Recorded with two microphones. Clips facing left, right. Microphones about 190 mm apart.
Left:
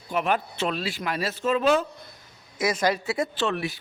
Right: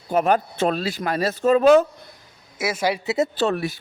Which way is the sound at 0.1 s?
40° right (ahead or behind).